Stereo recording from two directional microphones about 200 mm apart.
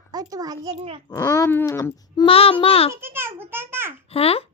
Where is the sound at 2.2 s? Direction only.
25° left (ahead or behind).